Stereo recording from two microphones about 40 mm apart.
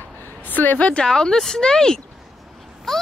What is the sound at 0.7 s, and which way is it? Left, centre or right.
Speech, left.